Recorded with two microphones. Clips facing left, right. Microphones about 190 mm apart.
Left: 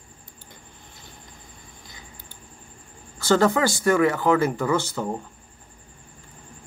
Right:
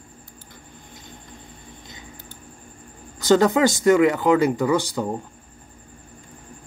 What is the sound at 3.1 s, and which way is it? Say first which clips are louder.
Speech: right 3 dB; 15° right (ahead or behind).